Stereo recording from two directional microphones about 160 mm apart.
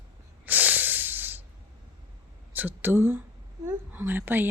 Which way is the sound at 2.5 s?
10° right (ahead or behind).